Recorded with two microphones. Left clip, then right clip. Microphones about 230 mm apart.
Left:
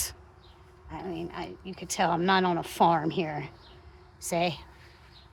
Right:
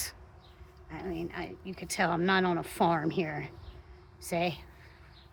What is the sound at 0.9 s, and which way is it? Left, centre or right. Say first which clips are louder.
Speech: left 1 dB; centre.